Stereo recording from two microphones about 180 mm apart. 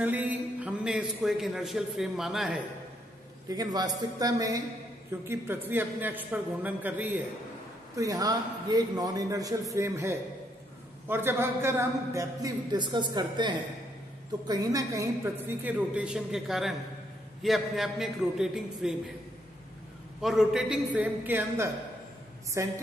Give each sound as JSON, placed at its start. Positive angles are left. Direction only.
{"t": 0.0, "sound": "a man's voice", "side_deg": -10}
{"t": 3.4, "sound": "a man's voice", "side_deg": -20}
{"t": 20.2, "sound": "a man's voice", "side_deg": 0}